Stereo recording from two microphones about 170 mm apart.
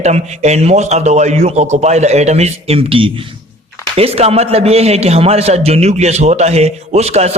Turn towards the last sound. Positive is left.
turn(degrees=-40)  # may be behind; listen again after turning